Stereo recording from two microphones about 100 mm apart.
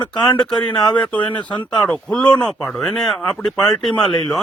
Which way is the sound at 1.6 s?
15° left (ahead or behind).